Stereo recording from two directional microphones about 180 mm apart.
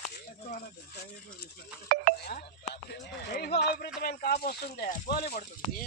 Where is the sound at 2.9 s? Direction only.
65° left (ahead or behind).